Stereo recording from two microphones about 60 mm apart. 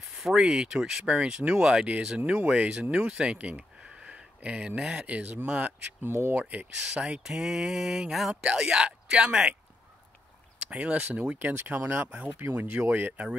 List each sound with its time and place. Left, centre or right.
0.1 s speech: centre
4.0 s a sound: centre
5.0 s speech: right
6.0 s speech: right
6.9 s speech: centre
8.5 s speech: centre
10.7 s speech: right
11.3 s speech: right